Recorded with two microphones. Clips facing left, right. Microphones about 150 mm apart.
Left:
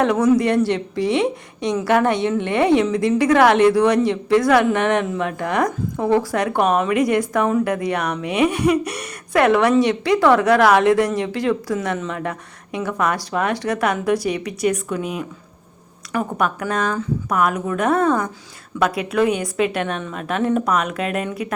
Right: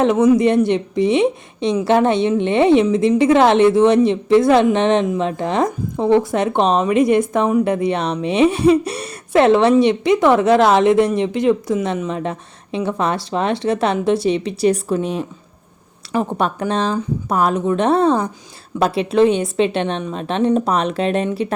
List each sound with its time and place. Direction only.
0.0 s a woman's voice: 20° right (ahead or behind)